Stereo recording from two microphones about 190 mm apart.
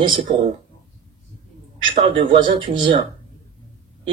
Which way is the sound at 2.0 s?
40° right (ahead or behind).